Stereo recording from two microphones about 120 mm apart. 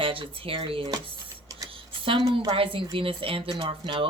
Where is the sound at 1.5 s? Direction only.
30° right (ahead or behind).